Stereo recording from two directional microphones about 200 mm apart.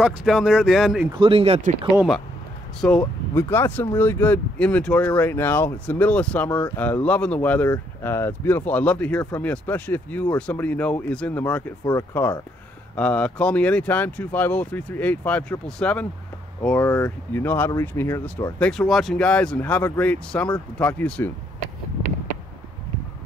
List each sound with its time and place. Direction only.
0.0 s speech: centre (ahead or behind)
1.1 s speech: 25° right (ahead or behind)
2.0 s speech: centre (ahead or behind)